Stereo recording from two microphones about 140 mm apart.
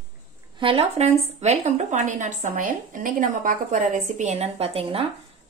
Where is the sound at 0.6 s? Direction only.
40° right (ahead or behind).